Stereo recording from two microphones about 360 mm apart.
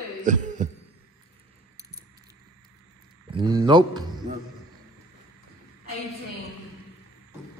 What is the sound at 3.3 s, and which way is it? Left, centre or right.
Speech, centre.